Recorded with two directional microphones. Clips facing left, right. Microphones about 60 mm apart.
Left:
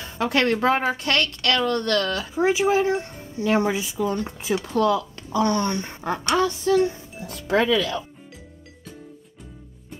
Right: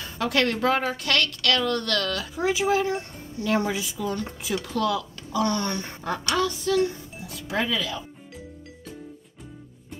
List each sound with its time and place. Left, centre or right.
0.0 s a woman's voice: left
7.2 s speech: left